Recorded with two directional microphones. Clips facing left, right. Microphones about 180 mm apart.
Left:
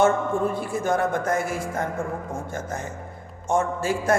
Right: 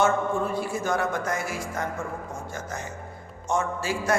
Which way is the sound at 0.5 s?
55° left (ahead or behind).